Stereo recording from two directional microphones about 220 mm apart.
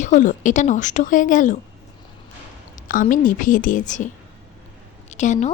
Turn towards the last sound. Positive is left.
turn(degrees=35)  # may be behind; listen again after turning